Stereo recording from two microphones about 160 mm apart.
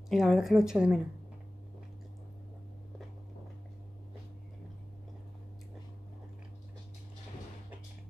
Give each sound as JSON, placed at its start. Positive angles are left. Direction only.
{"t": 0.1, "sound": "a woman's voice", "side_deg": 0}